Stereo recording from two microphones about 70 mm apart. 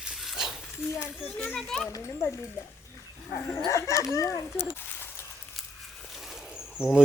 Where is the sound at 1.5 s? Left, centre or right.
Centre.